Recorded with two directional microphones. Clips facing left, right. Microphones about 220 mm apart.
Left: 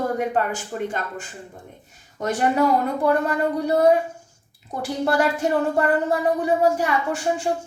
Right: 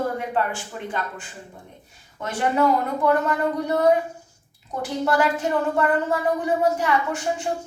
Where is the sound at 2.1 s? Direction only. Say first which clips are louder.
Left 2 dB; 40° left (ahead or behind).